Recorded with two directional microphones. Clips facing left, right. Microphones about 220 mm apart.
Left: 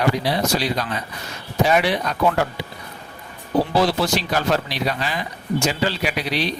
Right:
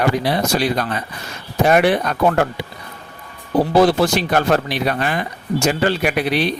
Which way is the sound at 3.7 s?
50° right (ahead or behind).